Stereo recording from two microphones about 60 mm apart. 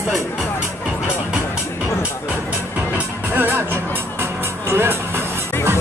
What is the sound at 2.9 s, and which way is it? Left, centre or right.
Music, right.